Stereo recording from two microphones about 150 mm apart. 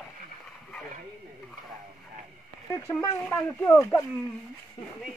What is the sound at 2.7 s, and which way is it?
Speech, 20° left (ahead or behind).